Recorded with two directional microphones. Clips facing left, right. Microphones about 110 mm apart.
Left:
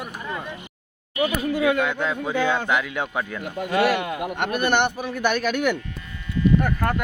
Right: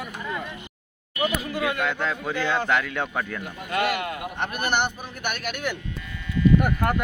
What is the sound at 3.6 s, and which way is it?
Speech, 90° left.